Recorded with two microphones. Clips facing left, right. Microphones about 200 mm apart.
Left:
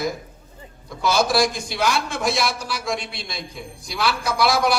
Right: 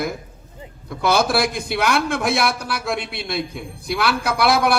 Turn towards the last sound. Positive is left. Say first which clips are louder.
# right 2 dB
turn(degrees=-60)  # may be behind; listen again after turning